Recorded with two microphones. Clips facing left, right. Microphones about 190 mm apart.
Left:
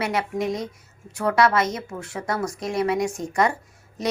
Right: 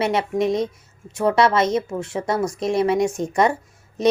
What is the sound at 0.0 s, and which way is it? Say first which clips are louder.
A woman's voice: right 5 dB; 25° right (ahead or behind).